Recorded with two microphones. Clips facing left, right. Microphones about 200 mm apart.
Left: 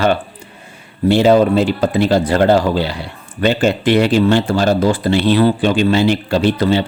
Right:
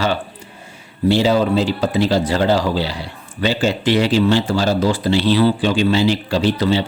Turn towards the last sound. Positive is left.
turn(degrees=55)  # may be behind; listen again after turning